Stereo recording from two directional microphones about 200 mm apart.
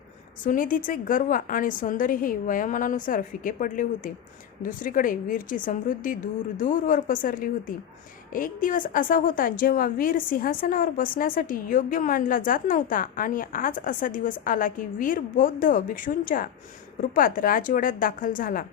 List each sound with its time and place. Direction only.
0.4 s a woman's voice: 40° left (ahead or behind)